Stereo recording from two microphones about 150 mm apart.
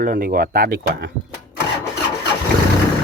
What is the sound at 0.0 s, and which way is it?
Speech, 80° right.